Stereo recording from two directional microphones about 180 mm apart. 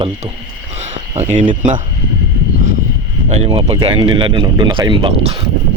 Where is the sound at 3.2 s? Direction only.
35° right (ahead or behind).